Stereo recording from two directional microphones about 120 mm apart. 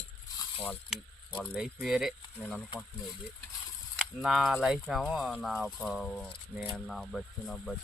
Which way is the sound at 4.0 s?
Centre (ahead or behind).